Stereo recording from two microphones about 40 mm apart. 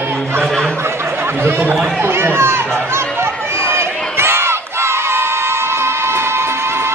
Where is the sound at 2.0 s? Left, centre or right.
Right.